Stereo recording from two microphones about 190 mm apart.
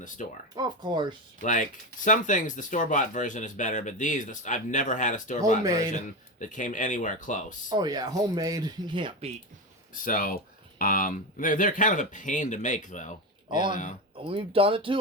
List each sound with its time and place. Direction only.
0.2 s speech: 40° left (ahead or behind)
0.5 s speech: 25° right (ahead or behind)
1.4 s speech: 45° left (ahead or behind)
6.4 s speech: 40° left (ahead or behind)
7.7 s speech: 20° right (ahead or behind)
9.9 s speech: 45° left (ahead or behind)
13.5 s speech: 25° right (ahead or behind)